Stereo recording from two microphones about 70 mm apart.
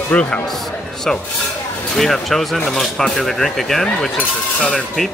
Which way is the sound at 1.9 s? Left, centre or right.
Centre.